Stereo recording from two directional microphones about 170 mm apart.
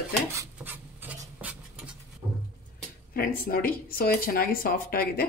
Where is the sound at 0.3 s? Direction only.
15° right (ahead or behind).